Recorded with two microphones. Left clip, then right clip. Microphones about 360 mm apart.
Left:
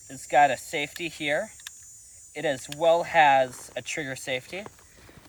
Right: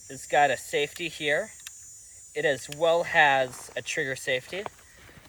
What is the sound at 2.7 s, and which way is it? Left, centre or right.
Speech, centre.